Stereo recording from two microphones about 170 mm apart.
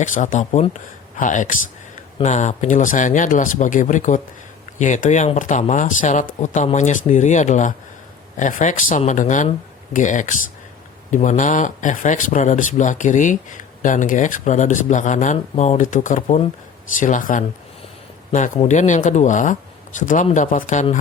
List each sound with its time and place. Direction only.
0.0 s speech: 50° left (ahead or behind)